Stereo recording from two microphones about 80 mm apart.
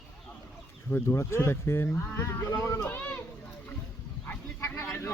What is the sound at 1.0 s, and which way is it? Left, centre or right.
Speech, left.